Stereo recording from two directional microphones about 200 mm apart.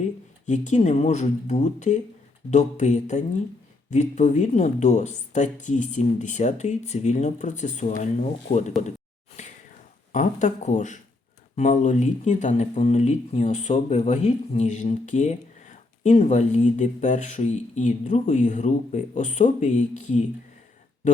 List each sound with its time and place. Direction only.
0.0 s speech: 35° left (ahead or behind)
9.4 s whispering: 35° left (ahead or behind)
10.1 s speech: 40° left (ahead or behind)